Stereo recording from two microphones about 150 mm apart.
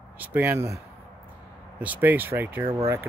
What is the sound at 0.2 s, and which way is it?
Speech, 10° right (ahead or behind).